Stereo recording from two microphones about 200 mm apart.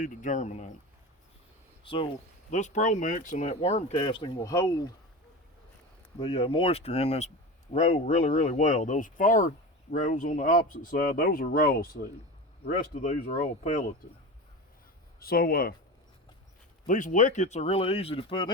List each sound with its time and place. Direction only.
0.0 s a man's voice: 40° left (ahead or behind)
1.8 s speech: 25° left (ahead or behind)
2.5 s a man's voice: 35° left (ahead or behind); by 4.7 s 15° left (ahead or behind)
6.1 s a man's voice: 30° left (ahead or behind); by 11.9 s 50° left (ahead or behind)
13.0 s a man's voice: 30° left (ahead or behind)
15.2 s speech: 50° left (ahead or behind)
16.8 s a man's voice: 40° left (ahead or behind)